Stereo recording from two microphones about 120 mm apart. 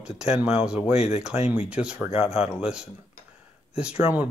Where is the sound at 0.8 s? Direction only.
60° left (ahead or behind).